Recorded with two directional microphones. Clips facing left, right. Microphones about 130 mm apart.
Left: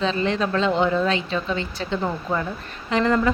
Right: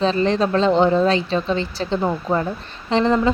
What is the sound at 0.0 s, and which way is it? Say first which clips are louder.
Speech: right 4 dB; 35° right (ahead or behind).